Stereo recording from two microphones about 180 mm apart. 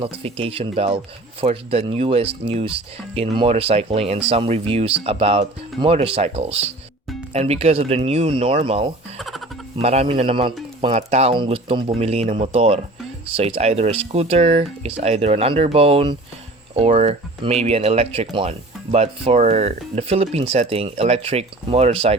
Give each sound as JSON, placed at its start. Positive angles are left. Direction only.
{"t": 0.0, "sound": "speech", "side_deg": -30}
{"t": 9.1, "sound": "music", "side_deg": 0}
{"t": 9.7, "sound": "speech", "side_deg": -35}